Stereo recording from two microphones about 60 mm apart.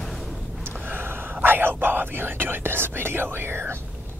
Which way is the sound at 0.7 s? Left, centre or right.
Right.